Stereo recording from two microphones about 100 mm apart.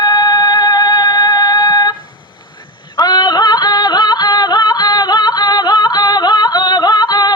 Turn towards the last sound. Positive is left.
turn(degrees=45)  # may be behind; listen again after turning